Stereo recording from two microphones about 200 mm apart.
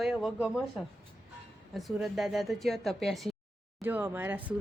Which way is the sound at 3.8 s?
10° right (ahead or behind).